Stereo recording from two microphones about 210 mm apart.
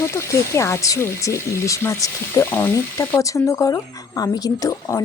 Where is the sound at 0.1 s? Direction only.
15° left (ahead or behind).